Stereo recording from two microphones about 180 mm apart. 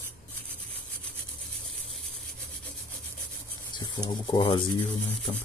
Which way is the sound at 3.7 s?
20° left (ahead or behind).